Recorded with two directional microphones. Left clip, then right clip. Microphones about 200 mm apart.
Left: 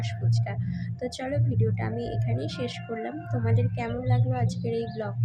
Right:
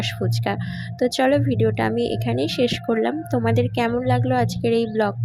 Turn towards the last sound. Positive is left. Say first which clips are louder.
# right 11 dB
turn(degrees=-40)  # may be behind; listen again after turning